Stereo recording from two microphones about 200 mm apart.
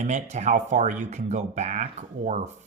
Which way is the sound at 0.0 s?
35° right (ahead or behind).